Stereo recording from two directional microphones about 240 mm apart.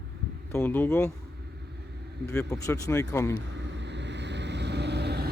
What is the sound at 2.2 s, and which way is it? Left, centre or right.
Speech, centre.